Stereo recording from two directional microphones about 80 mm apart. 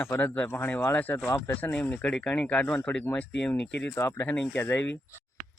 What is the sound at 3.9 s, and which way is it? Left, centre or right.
Speech, left.